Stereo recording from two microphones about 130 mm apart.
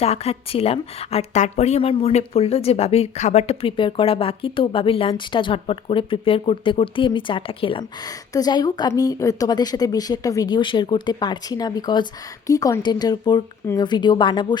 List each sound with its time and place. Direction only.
0.0 s a woman's voice: 50° left (ahead or behind)
8.3 s speech: 30° left (ahead or behind)